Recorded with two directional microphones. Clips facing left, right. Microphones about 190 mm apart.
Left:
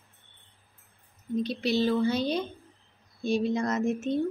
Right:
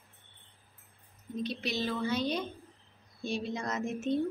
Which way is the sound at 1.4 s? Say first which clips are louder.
Left 7 dB; 35° left (ahead or behind).